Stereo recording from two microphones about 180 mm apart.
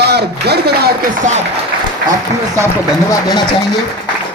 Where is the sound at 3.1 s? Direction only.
20° left (ahead or behind).